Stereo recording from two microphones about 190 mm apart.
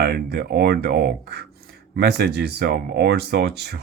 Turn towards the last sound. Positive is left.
turn(degrees=-60)  # may be behind; listen again after turning